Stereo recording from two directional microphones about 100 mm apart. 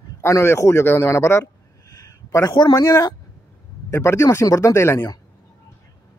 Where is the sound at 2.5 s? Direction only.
45° left (ahead or behind); by 5.1 s 25° left (ahead or behind).